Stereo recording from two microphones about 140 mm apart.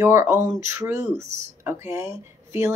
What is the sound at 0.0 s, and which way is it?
Speech, 20° right (ahead or behind).